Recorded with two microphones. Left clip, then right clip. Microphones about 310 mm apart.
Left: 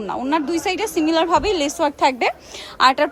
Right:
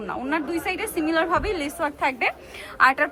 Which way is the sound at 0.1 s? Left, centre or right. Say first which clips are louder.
Left 5 dB; centre.